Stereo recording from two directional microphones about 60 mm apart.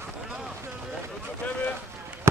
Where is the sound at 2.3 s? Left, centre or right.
Right.